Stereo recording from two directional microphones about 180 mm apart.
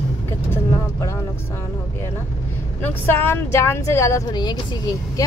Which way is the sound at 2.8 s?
10° left (ahead or behind).